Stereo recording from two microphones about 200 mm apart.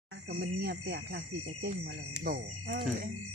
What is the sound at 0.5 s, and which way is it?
Speech, 55° right (ahead or behind).